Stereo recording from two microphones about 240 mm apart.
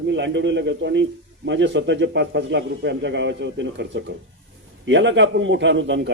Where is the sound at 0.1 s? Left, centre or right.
Right.